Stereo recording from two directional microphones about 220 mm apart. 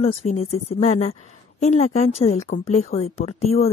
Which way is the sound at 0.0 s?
30° left (ahead or behind).